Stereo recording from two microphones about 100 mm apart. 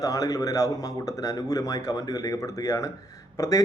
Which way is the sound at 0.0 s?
35° left (ahead or behind).